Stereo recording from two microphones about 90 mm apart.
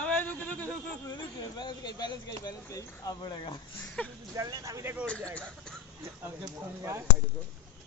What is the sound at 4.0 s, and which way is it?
Speech, 15° left (ahead or behind).